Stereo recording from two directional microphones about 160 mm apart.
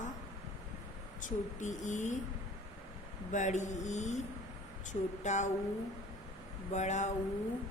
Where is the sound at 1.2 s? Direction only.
50° left (ahead or behind).